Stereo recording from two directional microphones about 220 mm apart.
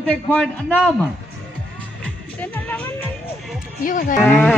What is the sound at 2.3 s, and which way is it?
Music, 5° left (ahead or behind).